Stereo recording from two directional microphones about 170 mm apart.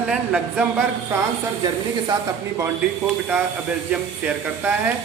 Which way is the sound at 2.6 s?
10° right (ahead or behind).